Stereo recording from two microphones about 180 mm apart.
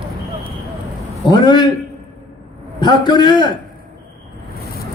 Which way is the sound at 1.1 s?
20° left (ahead or behind).